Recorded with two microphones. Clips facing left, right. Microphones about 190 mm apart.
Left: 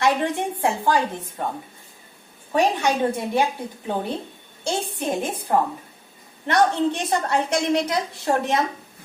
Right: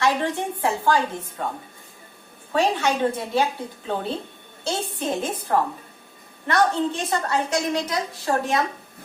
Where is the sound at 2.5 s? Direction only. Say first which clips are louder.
Left 1 dB; 15° left (ahead or behind).